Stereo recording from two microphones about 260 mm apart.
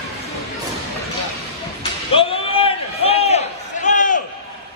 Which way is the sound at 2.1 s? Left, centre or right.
Left.